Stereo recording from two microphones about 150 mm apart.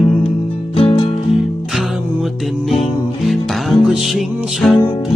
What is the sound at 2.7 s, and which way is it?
Music, centre (ahead or behind).